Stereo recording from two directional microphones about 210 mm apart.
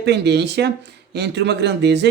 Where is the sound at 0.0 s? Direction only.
55° right (ahead or behind).